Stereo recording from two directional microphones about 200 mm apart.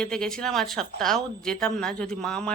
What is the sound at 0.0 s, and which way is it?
Speech, 5° left (ahead or behind).